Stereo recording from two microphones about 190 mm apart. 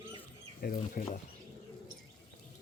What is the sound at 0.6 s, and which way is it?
Speech, 50° left (ahead or behind).